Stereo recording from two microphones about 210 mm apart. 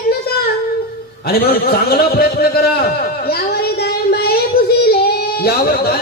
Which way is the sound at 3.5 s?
45° left (ahead or behind).